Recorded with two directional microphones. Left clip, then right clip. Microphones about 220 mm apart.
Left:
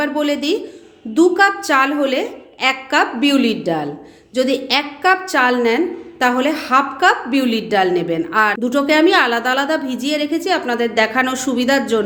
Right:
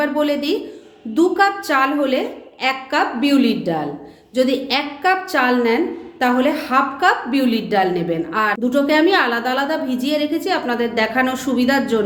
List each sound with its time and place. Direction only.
0.0 s a woman's voice: 20° left (ahead or behind)